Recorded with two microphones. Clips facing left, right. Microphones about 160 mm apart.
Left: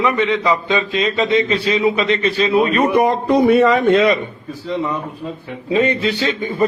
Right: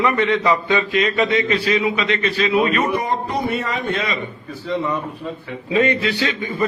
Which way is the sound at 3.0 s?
80° left.